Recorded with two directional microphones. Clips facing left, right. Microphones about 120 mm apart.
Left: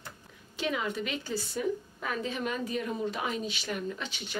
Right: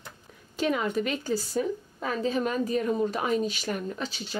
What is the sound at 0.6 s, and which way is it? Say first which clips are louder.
A woman's voice: right 5 dB; 45° right (ahead or behind).